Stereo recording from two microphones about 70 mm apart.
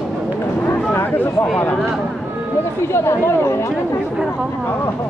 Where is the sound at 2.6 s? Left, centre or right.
Left.